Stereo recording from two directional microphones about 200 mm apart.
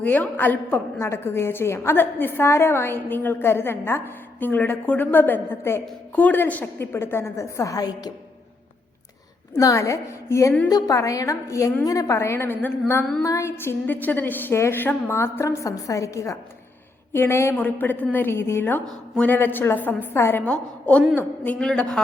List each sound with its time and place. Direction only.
0.0 s a woman's voice: 10° left (ahead or behind)
9.6 s a woman's voice: 15° left (ahead or behind)